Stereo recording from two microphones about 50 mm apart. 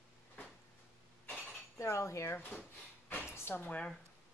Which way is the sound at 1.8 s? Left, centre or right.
Left.